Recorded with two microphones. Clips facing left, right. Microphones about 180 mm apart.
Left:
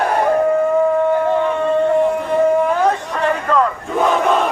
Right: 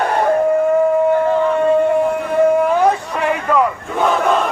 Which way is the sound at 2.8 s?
10° right (ahead or behind).